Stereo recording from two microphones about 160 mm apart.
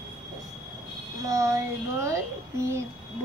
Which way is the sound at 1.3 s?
20° right (ahead or behind).